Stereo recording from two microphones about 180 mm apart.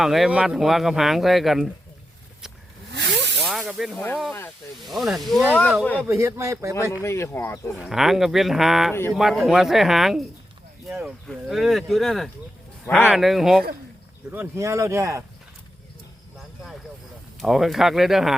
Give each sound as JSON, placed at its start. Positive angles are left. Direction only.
{"t": 0.0, "sound": "speech", "side_deg": 0}
{"t": 2.9, "sound": "hiss", "side_deg": -70}
{"t": 3.4, "sound": "spray", "side_deg": 0}
{"t": 3.9, "sound": "speech", "side_deg": 10}
{"t": 4.9, "sound": "speech", "side_deg": 0}
{"t": 6.1, "sound": "speech", "side_deg": -15}
{"t": 7.0, "sound": "speech", "side_deg": 15}
{"t": 7.8, "sound": "speech", "side_deg": 0}
{"t": 8.9, "sound": "speech", "side_deg": 15}
{"t": 9.1, "sound": "speech", "side_deg": 0}
{"t": 14.3, "sound": "speech", "side_deg": -15}
{"t": 17.4, "sound": "speech", "side_deg": 0}